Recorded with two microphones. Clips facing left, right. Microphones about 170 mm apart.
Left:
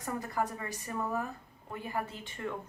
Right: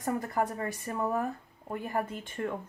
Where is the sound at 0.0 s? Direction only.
50° right (ahead or behind).